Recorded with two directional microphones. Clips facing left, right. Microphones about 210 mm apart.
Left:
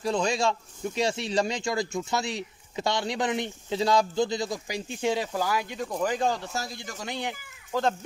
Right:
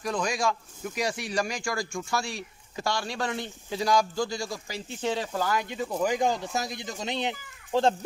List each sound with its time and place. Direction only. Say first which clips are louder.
0.0 s speech: left 2 dB; 25° left (ahead or behind); by 7.9 s 25° right (ahead or behind)